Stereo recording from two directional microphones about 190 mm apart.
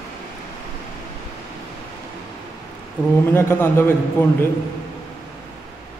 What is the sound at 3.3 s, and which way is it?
A man's voice, 10° left (ahead or behind).